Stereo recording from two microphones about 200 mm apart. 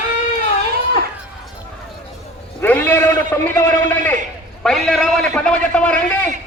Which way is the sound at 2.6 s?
10° left (ahead or behind).